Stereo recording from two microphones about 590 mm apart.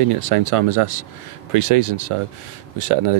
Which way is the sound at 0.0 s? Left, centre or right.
Right.